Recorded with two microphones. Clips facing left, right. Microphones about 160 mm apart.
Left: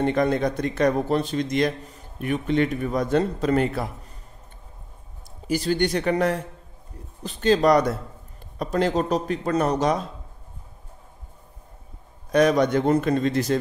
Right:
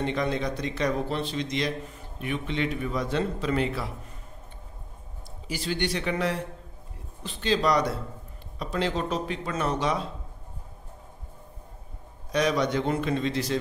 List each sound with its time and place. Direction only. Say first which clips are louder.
0.0 s a man's voice: left 6 dB; 50° left (ahead or behind)
5.5 s a man's voice: left 7 dB; 45° left (ahead or behind)
12.3 s a man's voice: left 6 dB; 50° left (ahead or behind)